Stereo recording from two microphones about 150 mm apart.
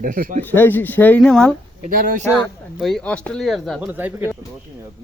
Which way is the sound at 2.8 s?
Centre (ahead or behind).